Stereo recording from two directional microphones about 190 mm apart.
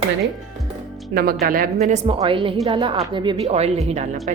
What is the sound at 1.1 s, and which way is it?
Speech, 55° right (ahead or behind).